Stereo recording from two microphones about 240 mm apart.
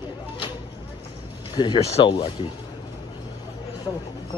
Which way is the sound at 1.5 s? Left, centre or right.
Centre.